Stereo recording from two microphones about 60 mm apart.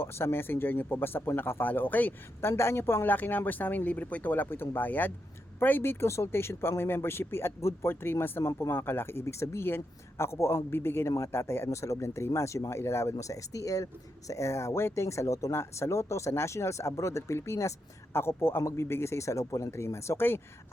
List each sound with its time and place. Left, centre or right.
0.0 s speech: left
2.4 s speech: left
3.1 s speech: left
14.3 s speech: left
15.0 s speech: left